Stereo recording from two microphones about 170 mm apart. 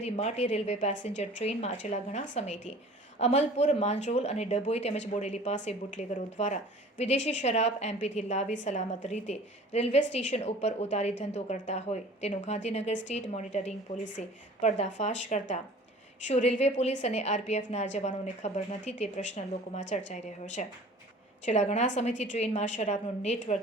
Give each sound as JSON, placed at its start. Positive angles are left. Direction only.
{"t": 0.0, "sound": "a woman's voice", "side_deg": 40}